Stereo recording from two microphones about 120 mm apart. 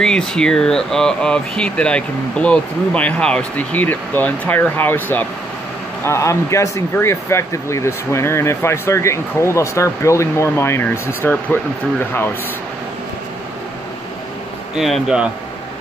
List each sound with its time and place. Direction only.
0.0 s speech: 5° left (ahead or behind)
14.8 s speech: 5° right (ahead or behind)